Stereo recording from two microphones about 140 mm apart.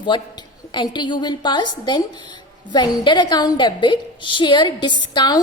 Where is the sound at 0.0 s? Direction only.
35° left (ahead or behind).